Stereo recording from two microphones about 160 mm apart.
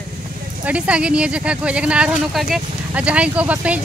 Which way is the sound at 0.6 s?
5° right (ahead or behind).